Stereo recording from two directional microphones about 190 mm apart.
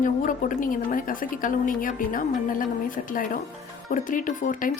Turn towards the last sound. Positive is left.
turn(degrees=45)  # may be behind; listen again after turning